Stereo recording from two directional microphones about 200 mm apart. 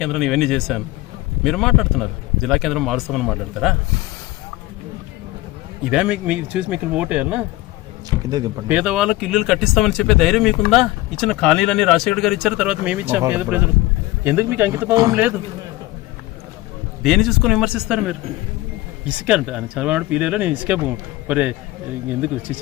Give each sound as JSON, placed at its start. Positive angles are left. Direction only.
{"t": 0.0, "sound": "speech", "side_deg": 0}
{"t": 5.9, "sound": "speech", "side_deg": -5}
{"t": 8.3, "sound": "speech", "side_deg": -20}
{"t": 8.7, "sound": "speech", "side_deg": -5}
{"t": 17.0, "sound": "speech", "side_deg": 0}